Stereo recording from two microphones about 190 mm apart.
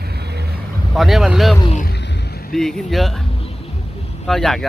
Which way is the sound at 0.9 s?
Centre (ahead or behind).